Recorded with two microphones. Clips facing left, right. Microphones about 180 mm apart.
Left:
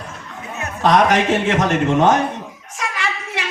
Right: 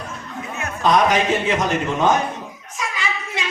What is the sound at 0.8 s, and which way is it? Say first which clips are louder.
A man's voice: left 2 dB; 70° left (ahead or behind).